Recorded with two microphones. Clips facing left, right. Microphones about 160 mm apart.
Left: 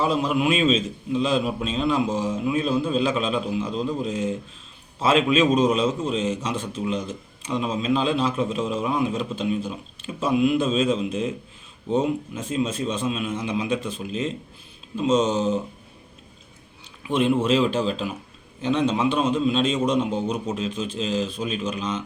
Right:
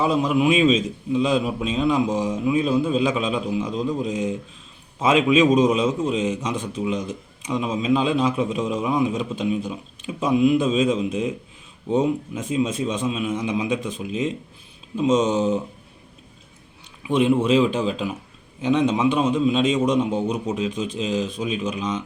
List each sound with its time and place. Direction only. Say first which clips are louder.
0.0 s a man's voice: right 2 dB; 15° right (ahead or behind)
17.1 s a man's voice: right 2 dB; 15° right (ahead or behind)